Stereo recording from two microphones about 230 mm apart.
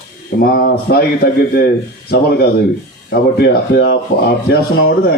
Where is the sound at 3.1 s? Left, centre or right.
Left.